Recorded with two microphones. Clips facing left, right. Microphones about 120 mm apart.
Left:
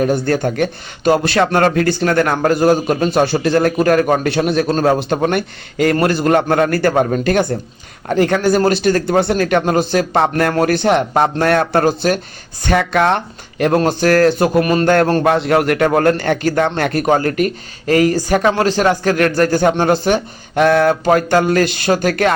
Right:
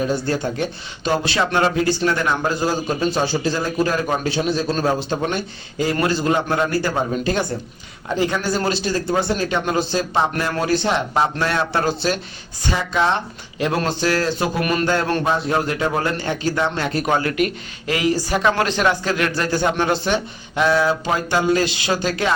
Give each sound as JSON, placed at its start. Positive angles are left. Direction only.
{"t": 0.0, "sound": "a man's voice", "side_deg": 60}
{"t": 12.6, "sound": "a man's voice", "side_deg": 65}
{"t": 14.6, "sound": "a man's voice", "side_deg": 35}
{"t": 15.2, "sound": "a man's voice", "side_deg": 70}
{"t": 17.1, "sound": "speech", "side_deg": 40}
{"t": 18.5, "sound": "speech", "side_deg": 35}